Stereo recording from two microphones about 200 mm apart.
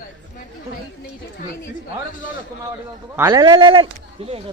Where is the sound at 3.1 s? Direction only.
15° right (ahead or behind).